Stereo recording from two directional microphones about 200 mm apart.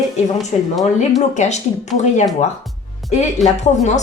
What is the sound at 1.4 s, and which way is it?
Speech, 35° left (ahead or behind).